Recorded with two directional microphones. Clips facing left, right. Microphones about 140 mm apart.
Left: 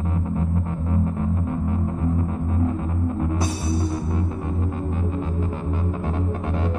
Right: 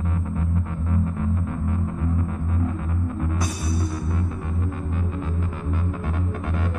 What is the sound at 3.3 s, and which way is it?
Music, 25° left (ahead or behind).